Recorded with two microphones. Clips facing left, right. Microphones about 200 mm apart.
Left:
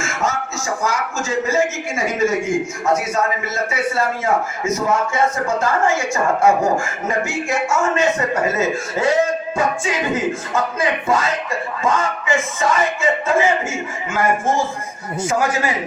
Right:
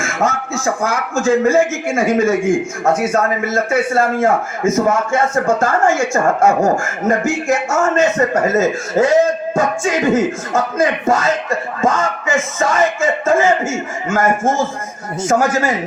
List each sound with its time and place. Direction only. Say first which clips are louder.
0.0 s a man's voice: right 4 dB; 55° right (ahead or behind)